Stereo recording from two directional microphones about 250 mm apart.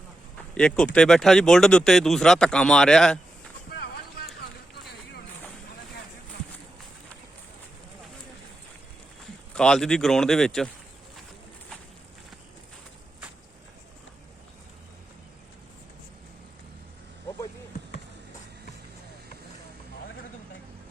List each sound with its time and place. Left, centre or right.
0.5 s speech: centre
9.6 s speech: centre